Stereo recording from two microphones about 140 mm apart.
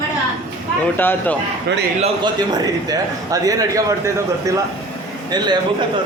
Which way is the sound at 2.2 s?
30° right (ahead or behind).